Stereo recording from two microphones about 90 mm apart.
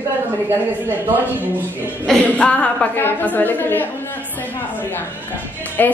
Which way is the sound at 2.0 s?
10° left (ahead or behind).